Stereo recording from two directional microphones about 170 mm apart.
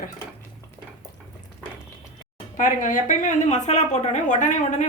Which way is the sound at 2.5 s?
50° left (ahead or behind).